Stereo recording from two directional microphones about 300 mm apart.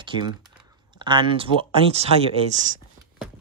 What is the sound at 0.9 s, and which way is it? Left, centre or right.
Speech, centre.